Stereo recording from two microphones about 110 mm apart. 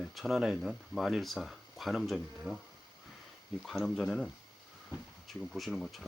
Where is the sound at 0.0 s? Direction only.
Centre (ahead or behind).